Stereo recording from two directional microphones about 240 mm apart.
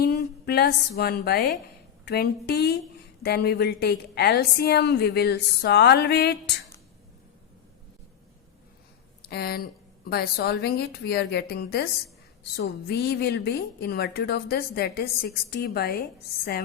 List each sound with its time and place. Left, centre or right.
0.0 s a woman's voice: left
9.2 s a woman's voice: left